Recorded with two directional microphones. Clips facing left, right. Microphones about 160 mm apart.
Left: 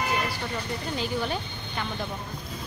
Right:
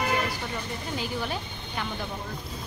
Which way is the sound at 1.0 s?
5° right (ahead or behind).